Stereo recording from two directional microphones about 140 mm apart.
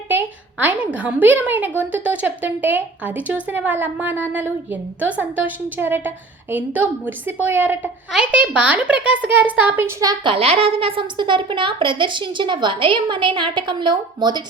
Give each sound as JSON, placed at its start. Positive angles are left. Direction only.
{"t": 0.1, "sound": "a woman's voice", "side_deg": -10}
{"t": 10.3, "sound": "a woman's voice", "side_deg": -45}